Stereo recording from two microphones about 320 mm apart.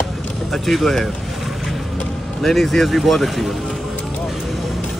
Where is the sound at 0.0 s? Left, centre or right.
Centre.